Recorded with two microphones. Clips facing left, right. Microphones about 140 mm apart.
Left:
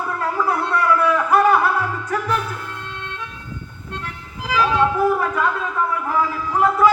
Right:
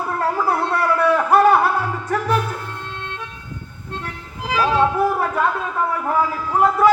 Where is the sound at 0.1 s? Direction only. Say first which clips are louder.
Right 2 dB; 30° right (ahead or behind).